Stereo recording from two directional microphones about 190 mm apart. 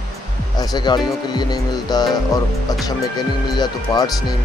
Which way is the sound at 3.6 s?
20° left (ahead or behind).